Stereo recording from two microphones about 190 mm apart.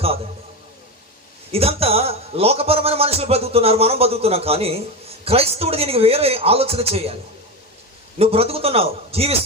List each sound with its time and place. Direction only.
1.5 s a man's voice: 30° right (ahead or behind)
8.2 s a man's voice: 30° right (ahead or behind)